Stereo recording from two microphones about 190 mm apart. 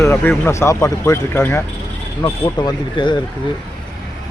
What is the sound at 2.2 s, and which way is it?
Speech, 25° left (ahead or behind).